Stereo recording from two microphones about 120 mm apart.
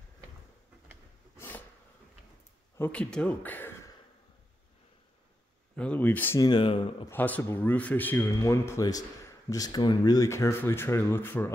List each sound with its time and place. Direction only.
2.8 s speech: 10° left (ahead or behind)
5.8 s speech: 15° left (ahead or behind)
6.4 s speech: 40° left (ahead or behind)
7.1 s speech: 15° left (ahead or behind)